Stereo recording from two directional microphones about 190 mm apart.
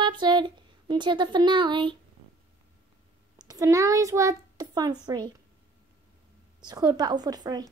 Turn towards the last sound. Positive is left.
turn(degrees=-20)  # may be behind; listen again after turning